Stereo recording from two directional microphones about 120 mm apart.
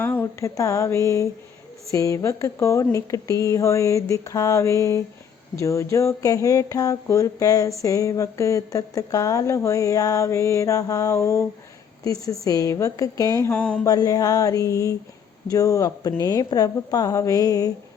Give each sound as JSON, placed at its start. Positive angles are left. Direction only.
{"t": 0.0, "sound": "speech", "side_deg": 20}
{"t": 13.5, "sound": "speech", "side_deg": 10}
{"t": 13.8, "sound": "speech", "side_deg": 30}